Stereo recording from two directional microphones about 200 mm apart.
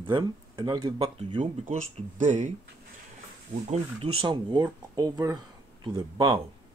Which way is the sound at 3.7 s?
30° right (ahead or behind).